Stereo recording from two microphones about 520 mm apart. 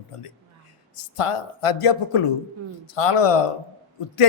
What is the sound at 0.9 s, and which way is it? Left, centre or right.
A man's voice, left.